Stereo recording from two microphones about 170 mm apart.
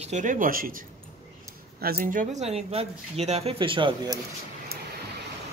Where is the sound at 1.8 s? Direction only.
55° right (ahead or behind); by 4.2 s 25° right (ahead or behind).